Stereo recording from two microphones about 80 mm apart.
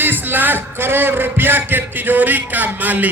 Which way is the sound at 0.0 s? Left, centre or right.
Right.